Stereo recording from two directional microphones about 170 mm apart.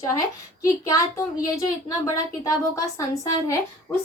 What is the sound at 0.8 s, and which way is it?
A woman's voice, 20° left (ahead or behind).